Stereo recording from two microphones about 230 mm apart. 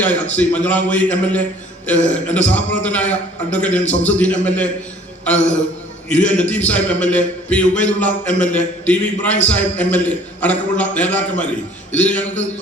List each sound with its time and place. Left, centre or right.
0.0 s a man's voice: centre
6.1 s a man's voice: centre